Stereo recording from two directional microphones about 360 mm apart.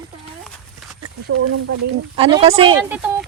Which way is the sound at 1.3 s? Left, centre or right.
Right.